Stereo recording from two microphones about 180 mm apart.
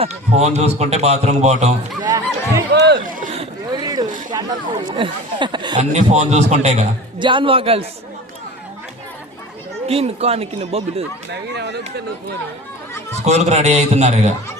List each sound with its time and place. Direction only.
0.0 s a man's voice: 35° right (ahead or behind)
2.0 s speech: 20° right (ahead or behind)
2.7 s speech: 70° right (ahead or behind)
3.2 s a sound: 45° right (ahead or behind)
3.4 s a sound: 20° right (ahead or behind)
4.3 s speech: 20° right (ahead or behind)
5.9 s a man's voice: 40° right (ahead or behind)
9.8 s a man's voice: 35° right (ahead or behind)
11.3 s speech: 70° right (ahead or behind)
13.2 s a man's voice: 40° right (ahead or behind)